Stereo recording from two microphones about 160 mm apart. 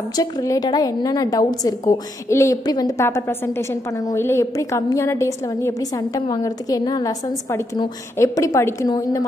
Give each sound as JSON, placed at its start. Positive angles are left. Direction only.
{"t": 0.1, "sound": "a woman's voice", "side_deg": 20}